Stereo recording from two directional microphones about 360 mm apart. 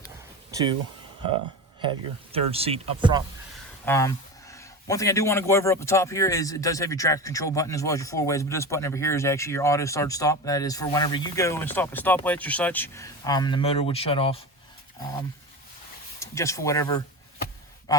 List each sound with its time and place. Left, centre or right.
0.5 s speech: centre
2.3 s speech: centre
3.8 s speech: centre
16.2 s speech: centre